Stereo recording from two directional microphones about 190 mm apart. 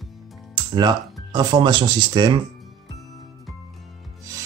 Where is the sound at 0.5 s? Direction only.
20° right (ahead or behind).